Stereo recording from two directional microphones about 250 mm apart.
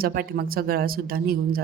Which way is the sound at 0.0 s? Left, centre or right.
Right.